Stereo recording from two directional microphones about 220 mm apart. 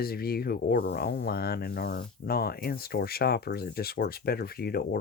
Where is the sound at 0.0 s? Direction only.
45° left (ahead or behind).